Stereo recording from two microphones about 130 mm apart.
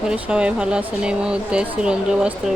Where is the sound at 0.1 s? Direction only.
5° right (ahead or behind).